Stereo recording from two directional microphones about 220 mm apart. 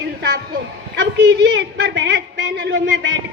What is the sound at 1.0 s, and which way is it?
A woman's voice, 55° right (ahead or behind).